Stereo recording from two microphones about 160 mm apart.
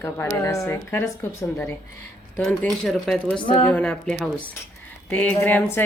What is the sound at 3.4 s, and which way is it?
Speech, 30° left (ahead or behind).